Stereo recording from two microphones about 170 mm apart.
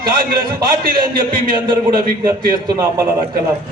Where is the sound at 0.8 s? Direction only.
55° right (ahead or behind).